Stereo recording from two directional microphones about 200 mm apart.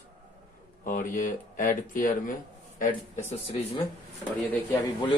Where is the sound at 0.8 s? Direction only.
40° left (ahead or behind).